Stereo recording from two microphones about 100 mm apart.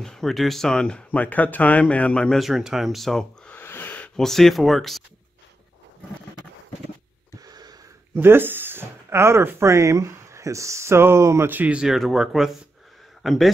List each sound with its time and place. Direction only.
0.0 s speech: 5° left (ahead or behind)
3.5 s owl: 20° left (ahead or behind)
4.2 s speech: 5° left (ahead or behind)
7.3 s a sound: 40° right (ahead or behind)
8.2 s speech: 20° right (ahead or behind); by 13.5 s centre (ahead or behind)